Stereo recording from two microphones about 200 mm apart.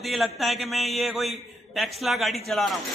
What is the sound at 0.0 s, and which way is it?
Speech, centre (ahead or behind).